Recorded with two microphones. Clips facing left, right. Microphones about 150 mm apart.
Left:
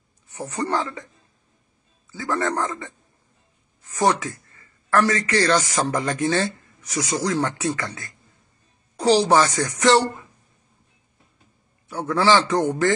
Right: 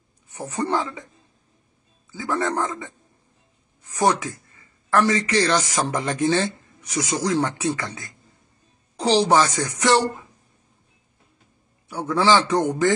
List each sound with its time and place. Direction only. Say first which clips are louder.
0.6 s a man's voice: right 1 dB; 20° right (ahead or behind)
2.1 s a man's voice: even; 15° right (ahead or behind)
3.9 s a man's voice: even; 20° right (ahead or behind)
12.1 s a man's voice: even; 15° right (ahead or behind)